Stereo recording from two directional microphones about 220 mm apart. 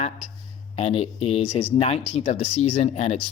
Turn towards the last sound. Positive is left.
turn(degrees=30)  # may be behind; listen again after turning